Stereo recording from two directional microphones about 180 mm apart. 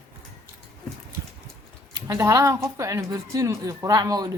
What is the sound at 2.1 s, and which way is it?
A woman's voice, 15° right (ahead or behind).